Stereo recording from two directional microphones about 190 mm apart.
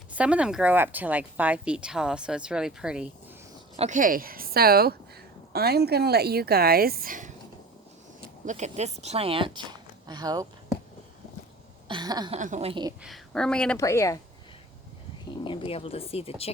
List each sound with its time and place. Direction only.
0.1 s speech: 5° right (ahead or behind)
3.8 s speech: 40° right (ahead or behind); by 10.8 s 20° right (ahead or behind)
11.9 s speech: 20° right (ahead or behind)
12.3 s a woman's voice: 40° right (ahead or behind)
13.0 s speech: centre (ahead or behind)
13.7 s a woman's voice: 15° left (ahead or behind)
15.4 s speech: 30° left (ahead or behind)